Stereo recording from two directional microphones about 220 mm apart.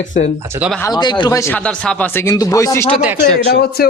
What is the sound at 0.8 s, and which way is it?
Speech, 20° left (ahead or behind).